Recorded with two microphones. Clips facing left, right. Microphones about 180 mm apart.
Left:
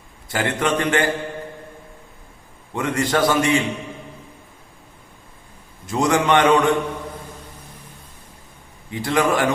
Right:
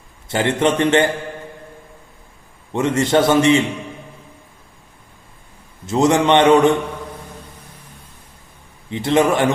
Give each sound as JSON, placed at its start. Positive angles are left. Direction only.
{"t": 0.3, "sound": "a man's voice", "side_deg": -25}
{"t": 2.7, "sound": "a man's voice", "side_deg": -25}
{"t": 5.8, "sound": "a man's voice", "side_deg": -25}
{"t": 8.9, "sound": "a man's voice", "side_deg": -25}